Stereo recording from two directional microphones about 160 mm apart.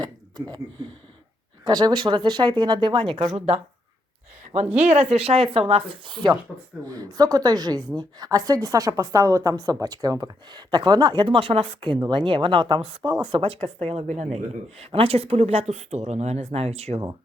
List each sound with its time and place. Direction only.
0.0 s a sound: 25° right (ahead or behind)
1.6 s a woman's voice: 25° right (ahead or behind)
4.8 s a woman's voice: 45° right (ahead or behind)